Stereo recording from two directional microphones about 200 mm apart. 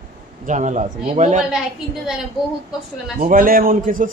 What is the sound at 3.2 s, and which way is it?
Speech, 45° right (ahead or behind).